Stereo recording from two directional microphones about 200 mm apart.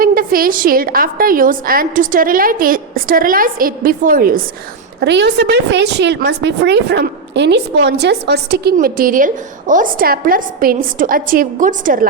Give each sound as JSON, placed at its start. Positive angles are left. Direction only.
{"t": 0.0, "sound": "a woman's voice", "side_deg": -45}
{"t": 4.9, "sound": "a woman's voice", "side_deg": -60}